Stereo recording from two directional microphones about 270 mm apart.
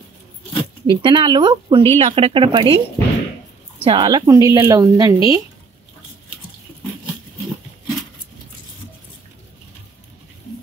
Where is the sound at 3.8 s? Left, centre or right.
Centre.